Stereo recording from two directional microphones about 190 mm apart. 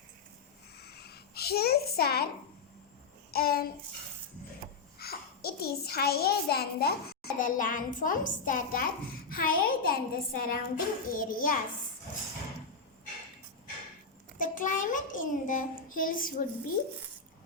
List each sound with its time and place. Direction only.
0.8 s a sound: 60° left (ahead or behind)
3.3 s a child's voice: 55° left (ahead or behind)
4.9 s a child's voice: 55° left (ahead or behind)
14.3 s a child's voice: 45° left (ahead or behind)